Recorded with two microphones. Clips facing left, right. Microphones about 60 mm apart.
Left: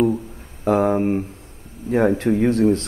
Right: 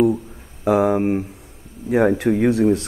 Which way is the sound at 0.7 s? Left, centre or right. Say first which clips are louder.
Right 1 dB; centre.